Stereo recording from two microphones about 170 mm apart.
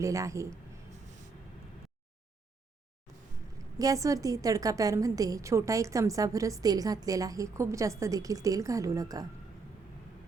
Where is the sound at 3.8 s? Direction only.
20° right (ahead or behind).